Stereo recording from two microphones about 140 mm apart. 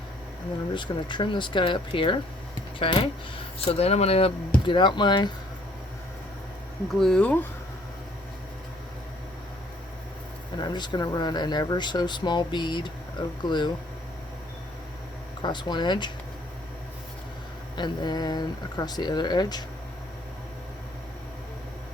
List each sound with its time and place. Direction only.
0.7 s speech: 35° left (ahead or behind)
4.6 s speech: 35° left (ahead or behind)
7.0 s speech: 5° left (ahead or behind)
10.6 s speech: 30° left (ahead or behind)
15.4 s speech: 30° left (ahead or behind)
17.7 s speech: 30° left (ahead or behind)